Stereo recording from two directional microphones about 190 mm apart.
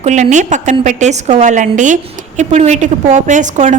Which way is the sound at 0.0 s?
40° right (ahead or behind).